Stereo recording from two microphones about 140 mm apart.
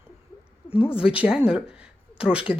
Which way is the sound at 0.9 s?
10° right (ahead or behind).